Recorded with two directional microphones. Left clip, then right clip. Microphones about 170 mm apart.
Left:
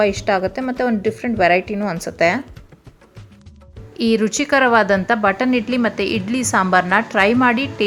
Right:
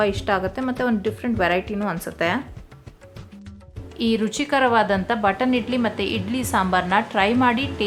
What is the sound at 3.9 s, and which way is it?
A woman's voice, 25° left (ahead or behind).